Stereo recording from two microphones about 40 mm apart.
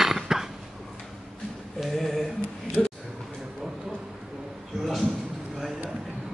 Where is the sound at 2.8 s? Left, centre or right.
Left.